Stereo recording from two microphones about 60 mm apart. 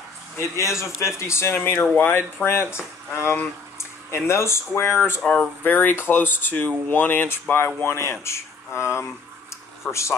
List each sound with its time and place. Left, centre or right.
0.6 s speech: left
5.2 s speech: centre
5.6 s speech: left